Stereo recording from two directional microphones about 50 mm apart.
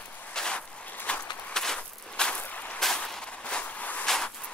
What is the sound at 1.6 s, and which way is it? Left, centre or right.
Walk, centre.